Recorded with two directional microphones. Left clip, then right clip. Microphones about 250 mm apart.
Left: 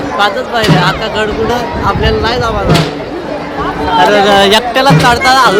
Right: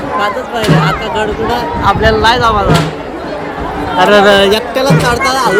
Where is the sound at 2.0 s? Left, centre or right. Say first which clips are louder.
Right 4 dB; centre.